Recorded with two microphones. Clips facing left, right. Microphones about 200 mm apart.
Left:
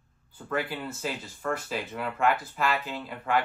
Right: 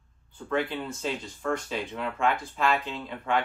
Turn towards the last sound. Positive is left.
turn(degrees=5)  # may be behind; listen again after turning